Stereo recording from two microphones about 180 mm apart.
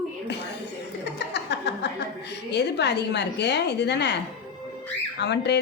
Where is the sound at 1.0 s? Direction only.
70° left (ahead or behind).